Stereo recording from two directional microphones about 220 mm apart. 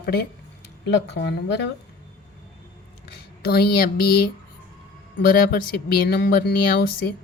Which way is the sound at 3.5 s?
45° left (ahead or behind).